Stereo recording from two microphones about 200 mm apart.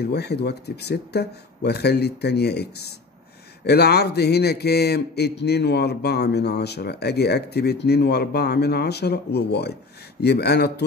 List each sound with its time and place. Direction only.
0.0 s a man's voice: 55° left (ahead or behind)